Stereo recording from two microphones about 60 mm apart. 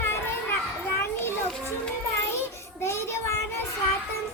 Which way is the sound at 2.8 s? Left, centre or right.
Left.